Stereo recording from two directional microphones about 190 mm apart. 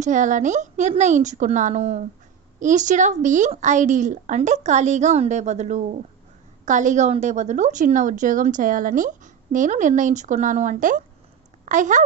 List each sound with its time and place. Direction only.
0.0 s a woman's voice: 40° right (ahead or behind)